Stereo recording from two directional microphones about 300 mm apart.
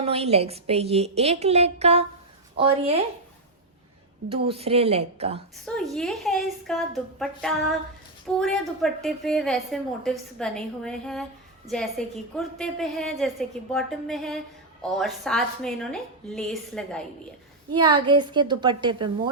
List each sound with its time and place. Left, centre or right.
0.0 s a woman's voice: centre
4.3 s a woman's voice: centre
5.6 s a woman's voice: centre
17.7 s a woman's voice: centre